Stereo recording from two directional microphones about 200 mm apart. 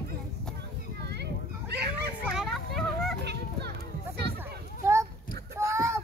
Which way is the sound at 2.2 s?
5° right (ahead or behind).